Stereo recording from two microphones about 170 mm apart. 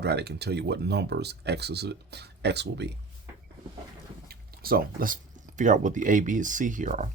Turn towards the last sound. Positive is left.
turn(degrees=-45)  # may be behind; listen again after turning